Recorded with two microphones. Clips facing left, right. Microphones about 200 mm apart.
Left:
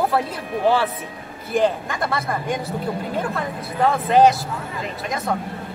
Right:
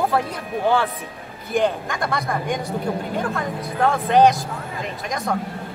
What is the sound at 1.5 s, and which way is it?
Speech, centre (ahead or behind).